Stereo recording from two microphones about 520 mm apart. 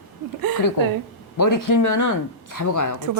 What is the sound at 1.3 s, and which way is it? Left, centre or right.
A woman's voice, left.